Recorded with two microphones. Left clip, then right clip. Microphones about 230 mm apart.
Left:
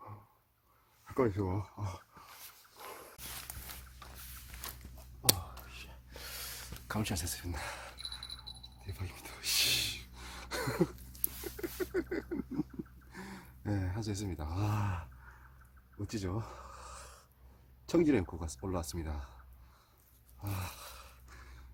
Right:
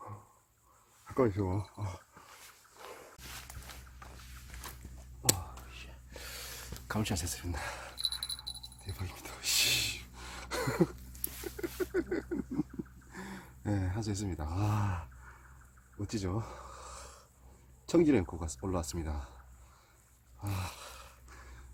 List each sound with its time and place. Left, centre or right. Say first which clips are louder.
1.0 s speech: right 2 dB; centre
2.4 s walk: left 1 dB; centre
5.2 s whispering: left 1 dB; left; by 8.4 s centre
8.8 s dog: right 2 dB; centre
11.4 s a sound: right 2 dB; centre
13.1 s speech: right 2 dB; centre
16.0 s a sound: right 2 dB; centre
17.8 s speech: right 2 dB; centre
20.4 s a sound: right 2 dB; centre